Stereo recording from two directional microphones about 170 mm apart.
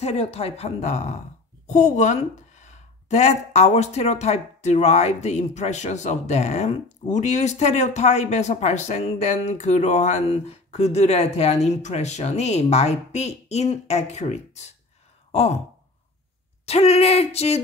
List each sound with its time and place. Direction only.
0.0 s speech: 35° left (ahead or behind)
15.3 s sigh: 35° left (ahead or behind)
16.6 s speech: 35° left (ahead or behind)